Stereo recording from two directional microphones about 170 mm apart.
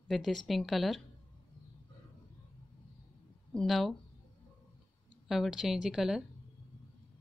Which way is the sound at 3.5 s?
Centre (ahead or behind).